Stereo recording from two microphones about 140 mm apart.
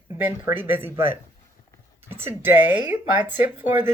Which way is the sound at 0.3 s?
15° right (ahead or behind).